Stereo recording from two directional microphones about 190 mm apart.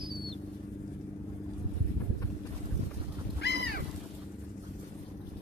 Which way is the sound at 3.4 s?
60° left (ahead or behind).